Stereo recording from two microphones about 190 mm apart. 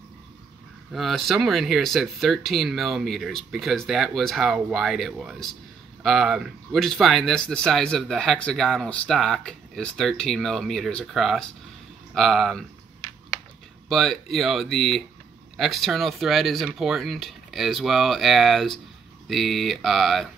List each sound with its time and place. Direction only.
0.9 s speech: centre (ahead or behind)
13.8 s speech: centre (ahead or behind)